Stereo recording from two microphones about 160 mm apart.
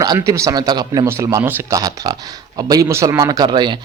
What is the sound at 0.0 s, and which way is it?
Speech, 20° right (ahead or behind).